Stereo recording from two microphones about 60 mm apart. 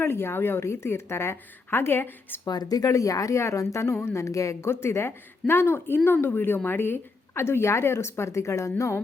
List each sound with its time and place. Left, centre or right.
0.0 s a woman's voice: left
2.4 s speech: left
4.7 s a woman's voice: left